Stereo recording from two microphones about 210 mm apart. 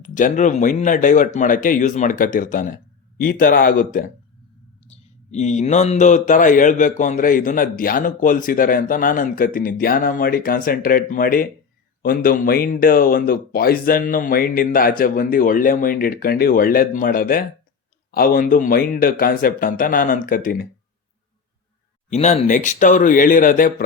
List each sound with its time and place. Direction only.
0.0 s speech: 40° left (ahead or behind)
22.1 s speech: 30° left (ahead or behind)